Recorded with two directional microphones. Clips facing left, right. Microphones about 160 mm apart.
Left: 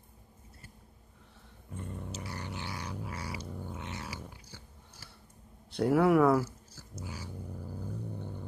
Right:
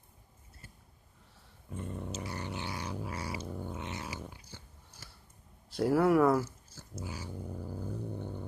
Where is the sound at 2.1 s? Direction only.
20° right (ahead or behind).